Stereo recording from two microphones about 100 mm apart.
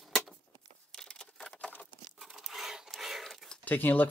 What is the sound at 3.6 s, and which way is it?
Speech, 20° left (ahead or behind).